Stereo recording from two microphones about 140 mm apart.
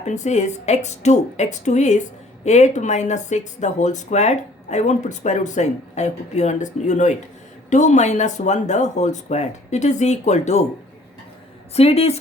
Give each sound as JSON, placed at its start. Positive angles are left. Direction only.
{"t": 0.0, "sound": "speech", "side_deg": 55}
{"t": 11.7, "sound": "speech", "side_deg": 45}